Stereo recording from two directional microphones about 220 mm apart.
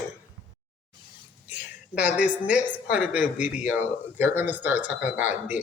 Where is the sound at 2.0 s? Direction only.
5° right (ahead or behind).